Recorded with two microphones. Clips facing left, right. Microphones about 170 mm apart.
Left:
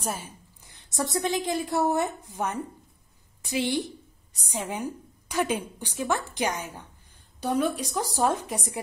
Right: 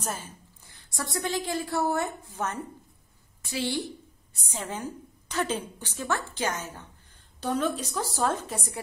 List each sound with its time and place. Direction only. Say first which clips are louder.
0.0 s a woman's voice: left 2 dB; 10° left (ahead or behind)